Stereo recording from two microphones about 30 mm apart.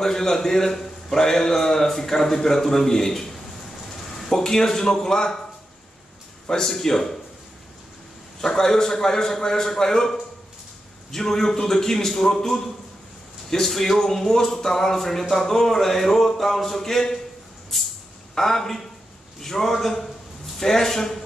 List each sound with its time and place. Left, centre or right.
0.0 s speech: centre
4.3 s speech: centre
6.5 s speech: centre
8.4 s speech: centre
18.3 s speech: centre